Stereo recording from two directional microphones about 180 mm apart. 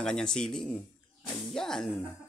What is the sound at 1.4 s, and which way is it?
Music, centre (ahead or behind).